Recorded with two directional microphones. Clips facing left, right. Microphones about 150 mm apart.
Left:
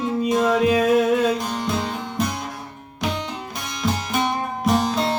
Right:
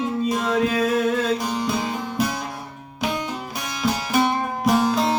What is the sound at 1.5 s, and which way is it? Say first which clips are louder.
Music: right 1 dB; 5° right (ahead or behind).